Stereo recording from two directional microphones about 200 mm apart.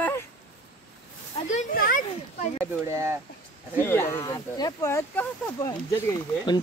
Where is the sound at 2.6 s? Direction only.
15° right (ahead or behind).